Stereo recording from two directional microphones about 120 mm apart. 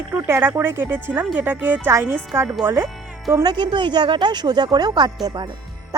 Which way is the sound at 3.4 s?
40° right (ahead or behind).